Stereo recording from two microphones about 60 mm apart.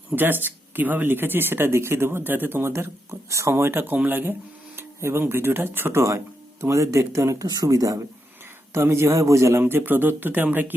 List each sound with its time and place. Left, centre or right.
0.2 s speech: right
3.5 s speech: right
4.8 s speech: right
6.0 s speech: right
8.7 s speech: right